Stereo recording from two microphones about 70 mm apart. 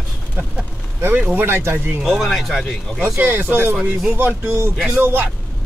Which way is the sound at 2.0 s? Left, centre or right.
Centre.